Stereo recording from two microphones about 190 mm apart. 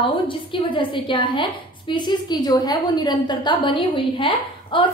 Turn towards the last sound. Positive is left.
turn(degrees=25)  # may be behind; listen again after turning